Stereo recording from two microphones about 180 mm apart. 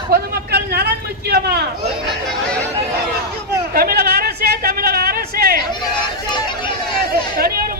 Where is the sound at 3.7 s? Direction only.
60° right (ahead or behind).